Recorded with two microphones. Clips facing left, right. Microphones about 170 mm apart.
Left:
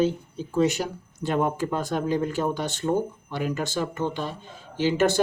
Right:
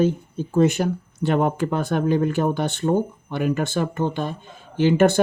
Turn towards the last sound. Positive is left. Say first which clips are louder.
# right 5 dB
turn(degrees=-55)  # may be behind; listen again after turning